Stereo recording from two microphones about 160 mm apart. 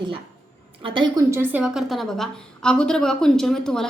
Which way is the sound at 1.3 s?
10° right (ahead or behind).